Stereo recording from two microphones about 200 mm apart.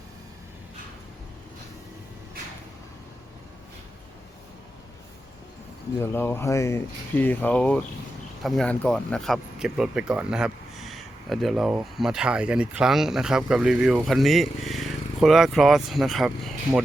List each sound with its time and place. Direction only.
6.0 s speech: 10° left (ahead or behind)